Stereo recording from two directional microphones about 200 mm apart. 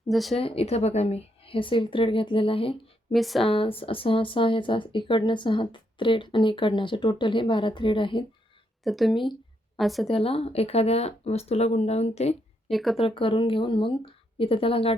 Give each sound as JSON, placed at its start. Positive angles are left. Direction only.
{"t": 0.1, "sound": "speech", "side_deg": 0}
{"t": 0.3, "sound": "speech", "side_deg": 30}
{"t": 3.1, "sound": "speech", "side_deg": 0}
{"t": 3.4, "sound": "speech", "side_deg": 30}
{"t": 8.8, "sound": "speech", "side_deg": 0}
{"t": 10.1, "sound": "speech", "side_deg": 30}
{"t": 12.7, "sound": "speech", "side_deg": 0}
{"t": 13.0, "sound": "speech", "side_deg": 25}